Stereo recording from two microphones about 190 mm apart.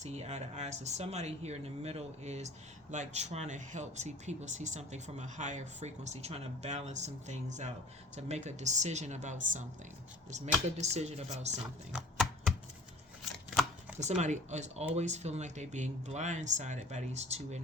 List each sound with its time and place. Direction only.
0.0 s speech: 35° right (ahead or behind)
11.9 s typing: centre (ahead or behind)
14.0 s speech: 35° right (ahead or behind)